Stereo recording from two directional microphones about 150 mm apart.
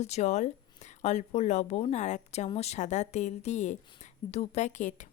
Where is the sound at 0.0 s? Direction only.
50° left (ahead or behind).